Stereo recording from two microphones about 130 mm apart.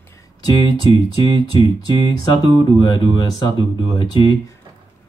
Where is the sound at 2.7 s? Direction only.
35° left (ahead or behind).